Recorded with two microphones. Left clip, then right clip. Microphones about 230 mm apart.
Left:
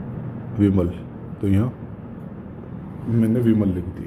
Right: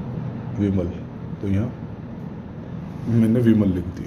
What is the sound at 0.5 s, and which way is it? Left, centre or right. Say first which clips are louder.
Speech: left 4 dB; left.